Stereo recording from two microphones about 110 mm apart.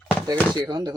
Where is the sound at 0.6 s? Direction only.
40° right (ahead or behind).